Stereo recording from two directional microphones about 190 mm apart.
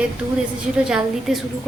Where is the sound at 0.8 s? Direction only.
5° right (ahead or behind).